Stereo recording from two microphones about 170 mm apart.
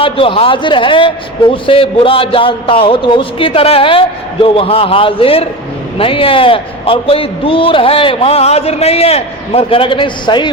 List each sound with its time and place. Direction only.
0.0 s a man's voice: 30° left (ahead or behind)